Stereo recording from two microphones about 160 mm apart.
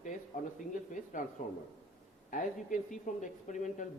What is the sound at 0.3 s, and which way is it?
A man's voice, 60° left (ahead or behind).